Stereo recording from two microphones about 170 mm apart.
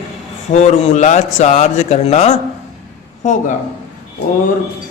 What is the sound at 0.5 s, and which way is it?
A man's voice, 45° left (ahead or behind).